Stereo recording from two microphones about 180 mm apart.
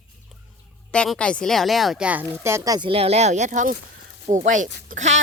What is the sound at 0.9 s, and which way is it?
A woman's voice, 5° left (ahead or behind).